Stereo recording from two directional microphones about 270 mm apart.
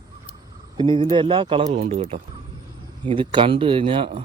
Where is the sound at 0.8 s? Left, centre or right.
Centre.